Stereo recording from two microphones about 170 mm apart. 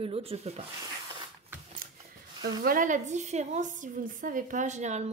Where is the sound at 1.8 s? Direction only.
60° right (ahead or behind).